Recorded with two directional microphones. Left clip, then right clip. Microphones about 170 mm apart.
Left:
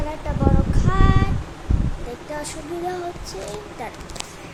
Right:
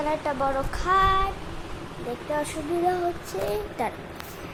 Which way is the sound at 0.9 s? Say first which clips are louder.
Right 4 dB; 30° right (ahead or behind).